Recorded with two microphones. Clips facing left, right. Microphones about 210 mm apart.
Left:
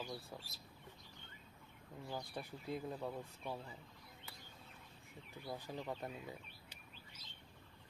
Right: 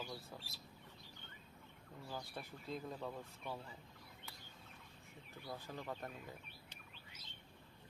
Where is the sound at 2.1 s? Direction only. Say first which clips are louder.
Left 2 dB; 15° left (ahead or behind).